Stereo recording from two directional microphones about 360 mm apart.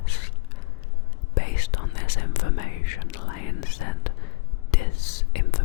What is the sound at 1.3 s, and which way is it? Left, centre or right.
Whispering, left.